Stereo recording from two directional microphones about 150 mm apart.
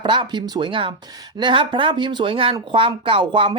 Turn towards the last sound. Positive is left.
turn(degrees=-35)  # may be behind; listen again after turning